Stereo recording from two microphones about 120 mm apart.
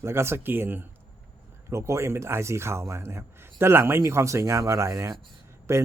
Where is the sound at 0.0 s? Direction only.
20° right (ahead or behind).